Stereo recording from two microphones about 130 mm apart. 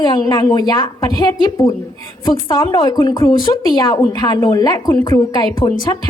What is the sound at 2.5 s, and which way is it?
A woman's voice, 35° left (ahead or behind).